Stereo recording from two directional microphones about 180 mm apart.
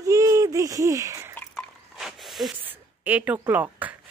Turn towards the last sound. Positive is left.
turn(degrees=-10)  # may be behind; listen again after turning